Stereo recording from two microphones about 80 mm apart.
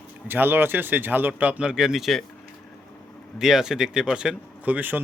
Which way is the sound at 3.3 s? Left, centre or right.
Centre.